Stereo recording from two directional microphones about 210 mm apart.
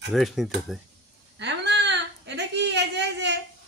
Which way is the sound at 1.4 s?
55° right (ahead or behind).